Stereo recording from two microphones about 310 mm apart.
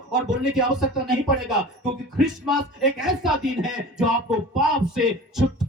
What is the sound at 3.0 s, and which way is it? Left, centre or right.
Speech, centre.